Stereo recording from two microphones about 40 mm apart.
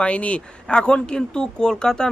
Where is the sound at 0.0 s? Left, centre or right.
Left.